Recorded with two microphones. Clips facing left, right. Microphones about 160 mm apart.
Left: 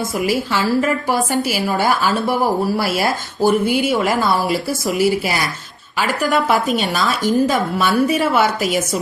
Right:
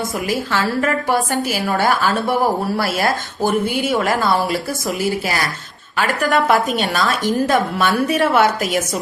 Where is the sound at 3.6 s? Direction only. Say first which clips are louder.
Left 2 dB; 50° right (ahead or behind).